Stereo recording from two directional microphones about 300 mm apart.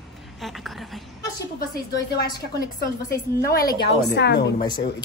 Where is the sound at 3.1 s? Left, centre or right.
Left.